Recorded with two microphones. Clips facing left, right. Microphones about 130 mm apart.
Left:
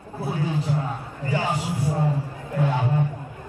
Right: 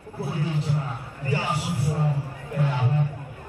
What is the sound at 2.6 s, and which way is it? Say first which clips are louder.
Chatter: left 2 dB; 15° left (ahead or behind).